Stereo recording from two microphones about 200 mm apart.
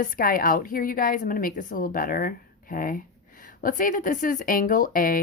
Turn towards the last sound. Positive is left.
turn(degrees=45)  # may be behind; listen again after turning